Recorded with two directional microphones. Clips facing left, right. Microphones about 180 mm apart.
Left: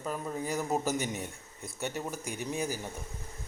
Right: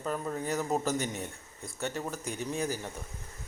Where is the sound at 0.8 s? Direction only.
15° left (ahead or behind).